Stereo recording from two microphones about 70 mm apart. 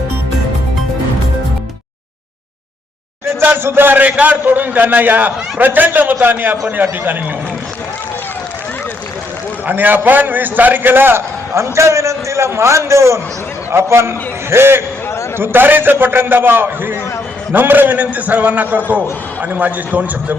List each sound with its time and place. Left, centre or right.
3.4 s a man's voice: right
9.6 s a man's voice: right